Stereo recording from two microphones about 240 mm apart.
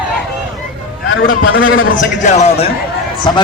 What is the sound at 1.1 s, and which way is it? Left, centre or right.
Speech, left.